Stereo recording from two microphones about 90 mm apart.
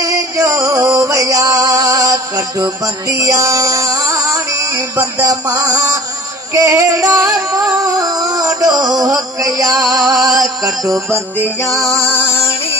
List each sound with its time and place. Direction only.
0.0 s music: 35° right (ahead or behind)
10.0 s music: centre (ahead or behind)
11.9 s music: 15° left (ahead or behind)